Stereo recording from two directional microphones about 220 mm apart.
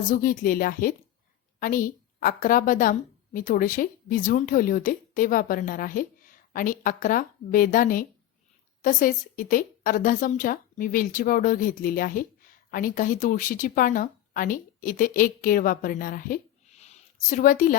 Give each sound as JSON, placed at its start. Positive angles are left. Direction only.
{"t": 0.1, "sound": "a woman's voice", "side_deg": 40}